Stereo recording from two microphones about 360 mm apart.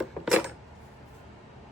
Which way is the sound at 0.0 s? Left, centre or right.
Centre.